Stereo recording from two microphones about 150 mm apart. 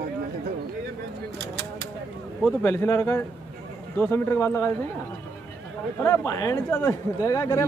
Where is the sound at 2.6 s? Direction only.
15° left (ahead or behind).